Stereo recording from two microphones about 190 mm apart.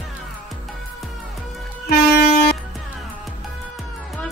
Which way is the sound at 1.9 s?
55° left (ahead or behind).